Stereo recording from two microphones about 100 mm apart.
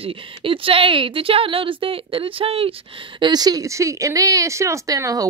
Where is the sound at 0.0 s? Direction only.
65° right (ahead or behind).